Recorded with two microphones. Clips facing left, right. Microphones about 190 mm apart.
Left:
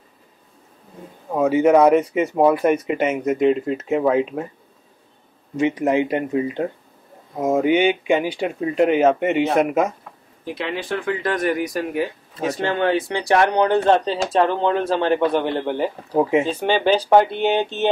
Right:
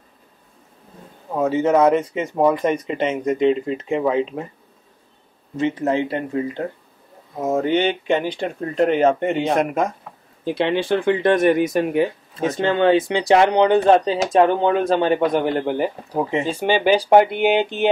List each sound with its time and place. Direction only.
1.4 s speech: 10° left (ahead or behind)
5.6 s speech: 15° left (ahead or behind)
10.4 s speech: 30° right (ahead or behind); by 15.9 s 10° right (ahead or behind)
16.1 s speech: 10° left (ahead or behind)
16.4 s speech: 10° right (ahead or behind)